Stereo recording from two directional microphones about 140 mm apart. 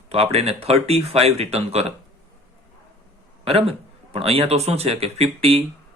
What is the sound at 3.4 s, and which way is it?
A man's voice, 45° right (ahead or behind).